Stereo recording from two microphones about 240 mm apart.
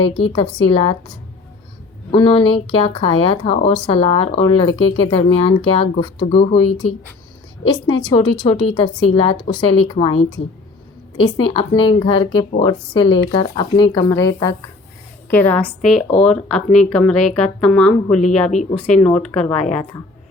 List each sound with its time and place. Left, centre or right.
0.3 s a woman's voice: left
2.1 s a woman's voice: left; by 18.2 s centre
18.5 s a woman's voice: left
18.9 s speech: centre